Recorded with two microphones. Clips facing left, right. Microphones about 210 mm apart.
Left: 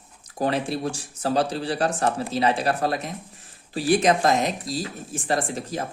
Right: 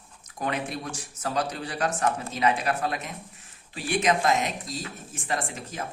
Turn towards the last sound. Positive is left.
turn(degrees=35)  # may be behind; listen again after turning